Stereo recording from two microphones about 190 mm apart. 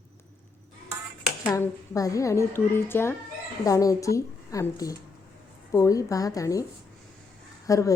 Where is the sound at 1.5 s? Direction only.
15° left (ahead or behind).